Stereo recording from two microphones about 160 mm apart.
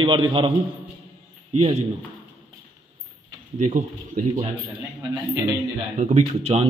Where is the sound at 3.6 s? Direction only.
50° right (ahead or behind).